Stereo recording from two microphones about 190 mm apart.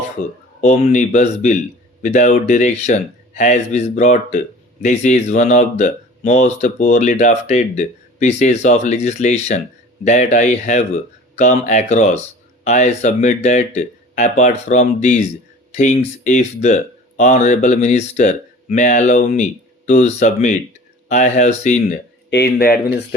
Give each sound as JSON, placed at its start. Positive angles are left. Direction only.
{"t": 0.6, "sound": "speech", "side_deg": 35}
{"t": 22.3, "sound": "speech", "side_deg": 60}